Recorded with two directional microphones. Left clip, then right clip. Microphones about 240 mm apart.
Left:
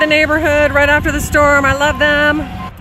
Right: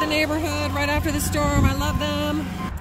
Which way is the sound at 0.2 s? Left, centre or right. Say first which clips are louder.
Left 12 dB; centre.